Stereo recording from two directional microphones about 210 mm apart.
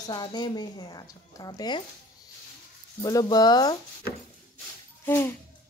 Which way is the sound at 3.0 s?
15° left (ahead or behind).